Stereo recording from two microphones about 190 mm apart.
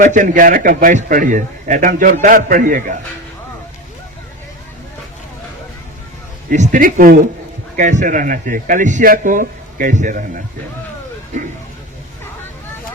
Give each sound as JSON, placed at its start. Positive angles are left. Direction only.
{"t": 0.0, "sound": "a man's voice", "side_deg": -45}
{"t": 6.5, "sound": "a man's voice", "side_deg": -45}